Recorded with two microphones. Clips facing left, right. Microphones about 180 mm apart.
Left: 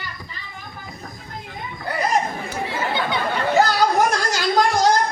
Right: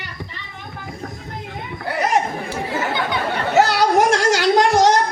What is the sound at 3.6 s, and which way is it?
Music, 75° right (ahead or behind).